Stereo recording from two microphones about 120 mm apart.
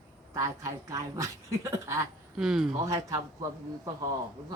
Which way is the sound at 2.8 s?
30° right (ahead or behind).